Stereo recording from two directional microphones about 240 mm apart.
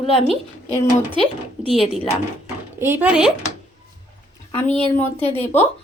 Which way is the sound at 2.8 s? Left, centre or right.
Centre.